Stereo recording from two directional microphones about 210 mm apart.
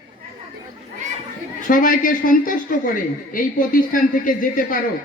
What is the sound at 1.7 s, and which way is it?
A woman's voice, 40° left (ahead or behind).